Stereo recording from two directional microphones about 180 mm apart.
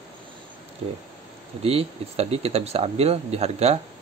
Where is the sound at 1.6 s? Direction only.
35° right (ahead or behind).